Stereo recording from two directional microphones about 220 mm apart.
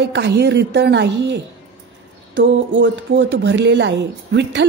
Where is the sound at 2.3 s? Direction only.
55° right (ahead or behind).